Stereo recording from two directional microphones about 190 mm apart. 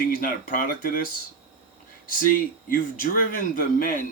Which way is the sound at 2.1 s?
50° left (ahead or behind).